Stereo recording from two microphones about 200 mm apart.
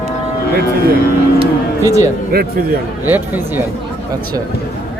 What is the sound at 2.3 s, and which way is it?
Speech, 50° right (ahead or behind).